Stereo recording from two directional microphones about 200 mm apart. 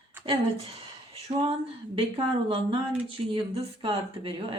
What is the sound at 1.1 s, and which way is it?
Speech, 25° right (ahead or behind).